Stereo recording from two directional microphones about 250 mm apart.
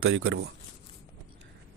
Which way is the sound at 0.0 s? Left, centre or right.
Right.